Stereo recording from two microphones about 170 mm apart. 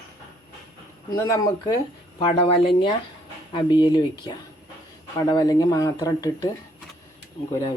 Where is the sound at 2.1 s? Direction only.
30° left (ahead or behind).